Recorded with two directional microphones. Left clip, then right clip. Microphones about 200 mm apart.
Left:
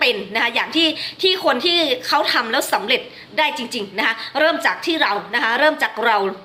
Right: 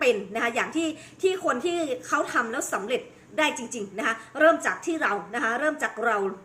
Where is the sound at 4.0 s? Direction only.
15° right (ahead or behind).